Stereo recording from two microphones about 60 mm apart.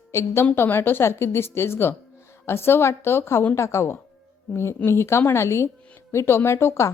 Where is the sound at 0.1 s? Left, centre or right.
Left.